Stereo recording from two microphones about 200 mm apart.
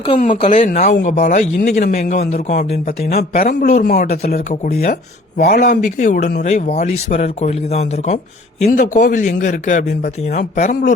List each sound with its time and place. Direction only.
0.2 s speech: 40° left (ahead or behind)
3.2 s speech: 50° left (ahead or behind)
5.4 s speech: 45° left (ahead or behind)